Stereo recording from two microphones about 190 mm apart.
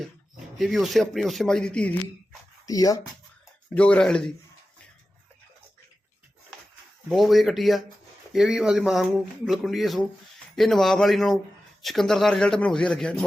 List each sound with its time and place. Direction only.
0.6 s speech: centre (ahead or behind)
2.6 s speech: 20° left (ahead or behind)
3.8 s speech: 5° left (ahead or behind)
7.1 s speech: centre (ahead or behind)